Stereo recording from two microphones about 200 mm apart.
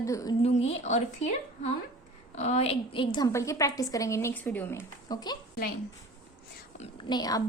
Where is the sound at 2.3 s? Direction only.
35° left (ahead or behind).